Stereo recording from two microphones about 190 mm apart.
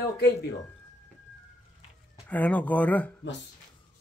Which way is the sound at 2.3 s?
10° left (ahead or behind).